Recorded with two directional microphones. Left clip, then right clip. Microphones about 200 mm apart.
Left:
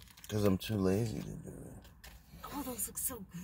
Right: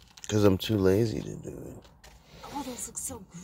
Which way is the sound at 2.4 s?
25° right (ahead or behind).